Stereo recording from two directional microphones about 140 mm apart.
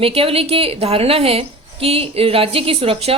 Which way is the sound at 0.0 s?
45° right (ahead or behind).